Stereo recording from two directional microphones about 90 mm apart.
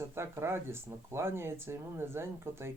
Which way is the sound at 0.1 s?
30° right (ahead or behind).